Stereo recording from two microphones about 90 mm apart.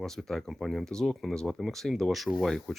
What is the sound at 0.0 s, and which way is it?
Speech, 5° left (ahead or behind).